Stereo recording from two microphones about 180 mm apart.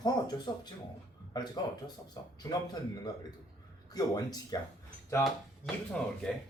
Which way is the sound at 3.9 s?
20° left (ahead or behind).